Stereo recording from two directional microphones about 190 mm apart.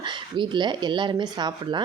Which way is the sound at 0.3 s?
25° right (ahead or behind).